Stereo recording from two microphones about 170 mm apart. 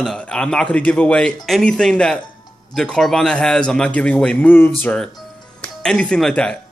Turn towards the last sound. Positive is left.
turn(degrees=5)  # may be behind; listen again after turning